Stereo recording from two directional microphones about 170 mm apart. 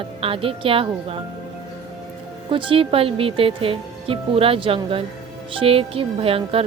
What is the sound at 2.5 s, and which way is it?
Speech, 30° right (ahead or behind).